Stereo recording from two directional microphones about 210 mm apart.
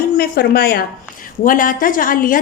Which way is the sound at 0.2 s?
50° left (ahead or behind).